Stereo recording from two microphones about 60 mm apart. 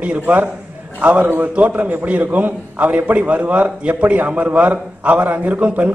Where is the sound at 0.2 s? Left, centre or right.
Right.